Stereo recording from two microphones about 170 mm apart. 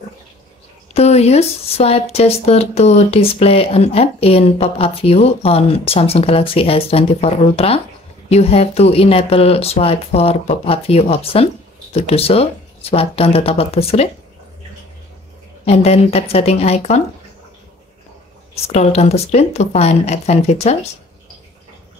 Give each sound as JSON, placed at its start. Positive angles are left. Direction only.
{"t": 0.9, "sound": "speech", "side_deg": 40}
{"t": 15.6, "sound": "speech", "side_deg": 35}
{"t": 18.5, "sound": "speech", "side_deg": 40}